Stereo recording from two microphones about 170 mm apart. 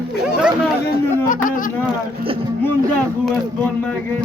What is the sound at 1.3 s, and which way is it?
Speech, 50° left (ahead or behind).